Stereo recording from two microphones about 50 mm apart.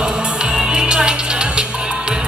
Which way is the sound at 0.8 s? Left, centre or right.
Centre.